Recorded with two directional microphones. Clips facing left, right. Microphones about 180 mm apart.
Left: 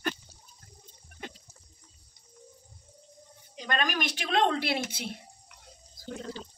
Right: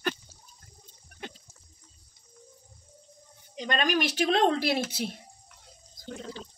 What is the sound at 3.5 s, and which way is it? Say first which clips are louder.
Speech: right 4 dB; 25° right (ahead or behind).